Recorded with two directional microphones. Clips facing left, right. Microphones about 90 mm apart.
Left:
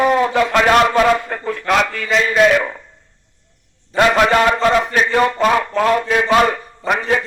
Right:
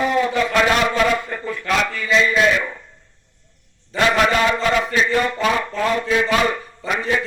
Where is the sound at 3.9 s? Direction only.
50° left (ahead or behind).